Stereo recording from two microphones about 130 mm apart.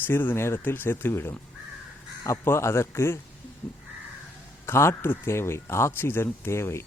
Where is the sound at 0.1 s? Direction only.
15° left (ahead or behind).